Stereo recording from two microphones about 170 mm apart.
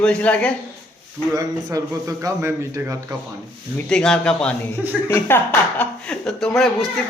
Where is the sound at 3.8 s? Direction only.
5° left (ahead or behind).